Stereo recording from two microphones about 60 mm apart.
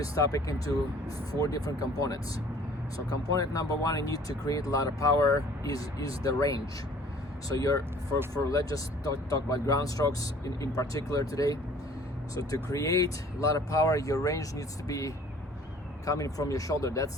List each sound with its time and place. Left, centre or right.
0.0 s speech: left